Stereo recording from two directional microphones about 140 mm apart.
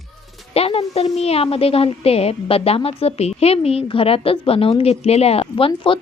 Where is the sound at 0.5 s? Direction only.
45° left (ahead or behind).